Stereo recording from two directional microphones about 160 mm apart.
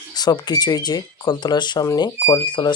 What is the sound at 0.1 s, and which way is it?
Speech, 25° left (ahead or behind).